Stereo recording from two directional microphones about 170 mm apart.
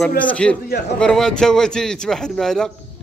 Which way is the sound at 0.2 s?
10° left (ahead or behind).